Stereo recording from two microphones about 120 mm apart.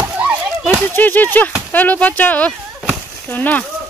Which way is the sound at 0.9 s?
15° left (ahead or behind).